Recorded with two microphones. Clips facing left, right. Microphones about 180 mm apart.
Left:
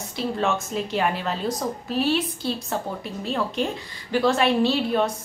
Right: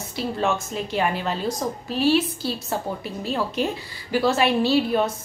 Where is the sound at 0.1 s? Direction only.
Centre (ahead or behind).